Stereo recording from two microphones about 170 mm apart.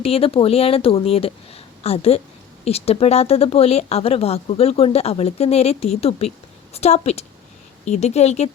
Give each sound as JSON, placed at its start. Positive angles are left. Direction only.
{"t": 0.0, "sound": "speech", "side_deg": 35}